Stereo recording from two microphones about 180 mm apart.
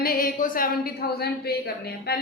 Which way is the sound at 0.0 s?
55° left (ahead or behind).